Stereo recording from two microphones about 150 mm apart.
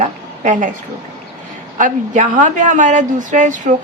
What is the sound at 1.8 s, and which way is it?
A woman's voice, 60° right (ahead or behind).